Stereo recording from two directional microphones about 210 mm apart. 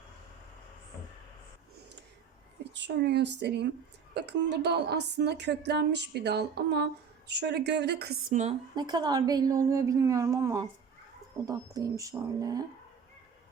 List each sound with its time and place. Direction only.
2.7 s a woman's voice: 55° right (ahead or behind)
8.7 s a woman's voice: 20° right (ahead or behind)